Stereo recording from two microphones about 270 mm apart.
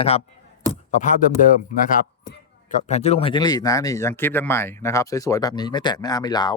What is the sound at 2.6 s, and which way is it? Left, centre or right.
Speech, left.